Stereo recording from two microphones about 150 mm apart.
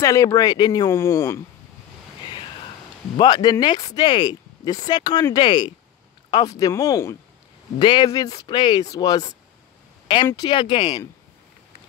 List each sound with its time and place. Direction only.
0.0 s speech: 20° left (ahead or behind)
3.2 s speech: 30° left (ahead or behind)
7.8 s speech: 30° left (ahead or behind)